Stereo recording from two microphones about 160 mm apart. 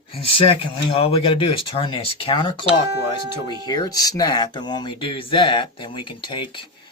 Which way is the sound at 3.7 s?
25° left (ahead or behind).